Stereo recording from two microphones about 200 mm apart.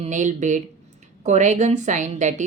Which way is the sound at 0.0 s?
40° right (ahead or behind).